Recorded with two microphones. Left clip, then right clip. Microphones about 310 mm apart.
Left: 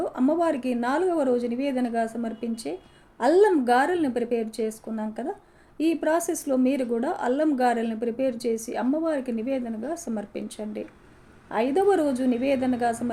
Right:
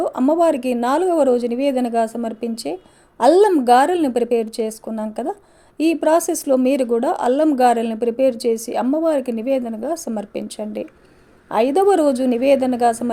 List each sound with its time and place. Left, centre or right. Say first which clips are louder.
0.0 s a woman's voice: right 8 dB; right